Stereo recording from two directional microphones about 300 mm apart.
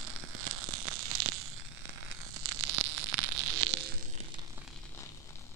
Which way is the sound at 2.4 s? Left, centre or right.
Right.